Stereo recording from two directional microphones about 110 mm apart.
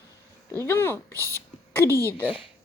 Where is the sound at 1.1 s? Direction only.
30° right (ahead or behind).